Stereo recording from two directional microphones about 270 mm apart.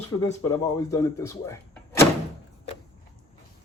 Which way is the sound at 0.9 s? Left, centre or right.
Centre.